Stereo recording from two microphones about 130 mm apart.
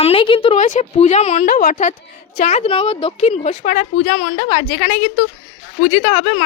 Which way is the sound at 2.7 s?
45° left (ahead or behind).